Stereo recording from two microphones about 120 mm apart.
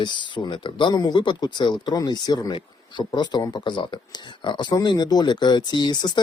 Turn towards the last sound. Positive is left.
turn(degrees=35)  # may be behind; listen again after turning